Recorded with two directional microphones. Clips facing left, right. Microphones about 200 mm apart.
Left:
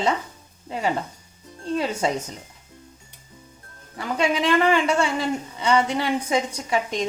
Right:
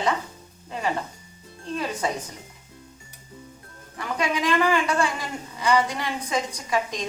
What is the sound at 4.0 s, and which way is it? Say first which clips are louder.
A woman's voice: left 3 dB; 25° left (ahead or behind).